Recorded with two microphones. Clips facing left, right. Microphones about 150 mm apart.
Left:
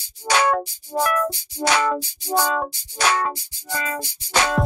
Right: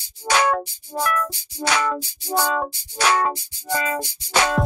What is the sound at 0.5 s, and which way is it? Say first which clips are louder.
Music: left 1 dB; 10° left (ahead or behind).